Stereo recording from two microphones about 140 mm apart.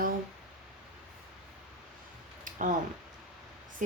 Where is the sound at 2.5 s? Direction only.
65° right (ahead or behind).